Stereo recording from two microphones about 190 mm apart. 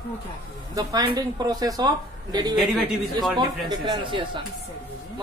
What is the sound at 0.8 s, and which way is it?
A woman's voice, 20° right (ahead or behind).